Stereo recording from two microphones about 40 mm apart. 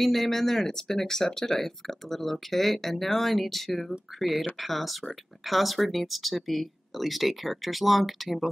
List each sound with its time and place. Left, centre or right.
0.0 s speech: centre